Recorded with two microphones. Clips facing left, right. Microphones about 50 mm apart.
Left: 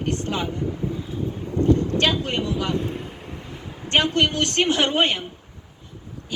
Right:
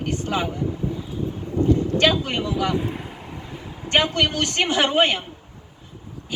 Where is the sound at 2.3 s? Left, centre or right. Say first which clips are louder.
Right 1 dB; centre.